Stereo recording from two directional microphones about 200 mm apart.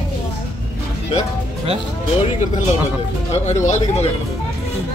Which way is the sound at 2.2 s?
40° left (ahead or behind).